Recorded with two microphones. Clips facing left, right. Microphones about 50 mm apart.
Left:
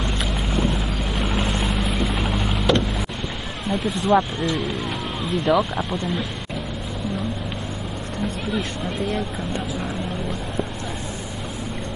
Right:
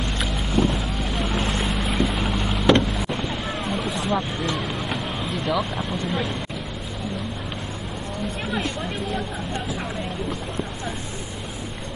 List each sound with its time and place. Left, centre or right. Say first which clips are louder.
0.2 s boat: right 3 dB; centre
4.1 s speech: left 8 dB; centre
5.5 s speech: left 6 dB; left